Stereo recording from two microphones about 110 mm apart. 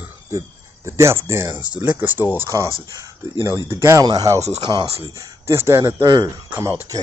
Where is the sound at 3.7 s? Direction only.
25° right (ahead or behind).